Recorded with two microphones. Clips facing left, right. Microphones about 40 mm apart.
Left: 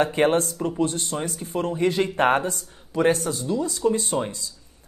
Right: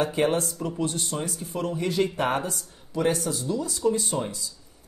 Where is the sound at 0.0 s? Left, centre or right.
Left.